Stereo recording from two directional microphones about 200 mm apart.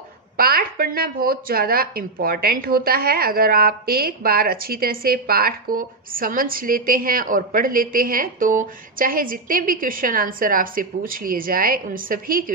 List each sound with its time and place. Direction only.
0.4 s speech: 50° right (ahead or behind)